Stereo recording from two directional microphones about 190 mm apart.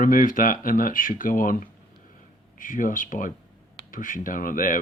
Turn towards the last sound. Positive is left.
turn(degrees=45)  # may be behind; listen again after turning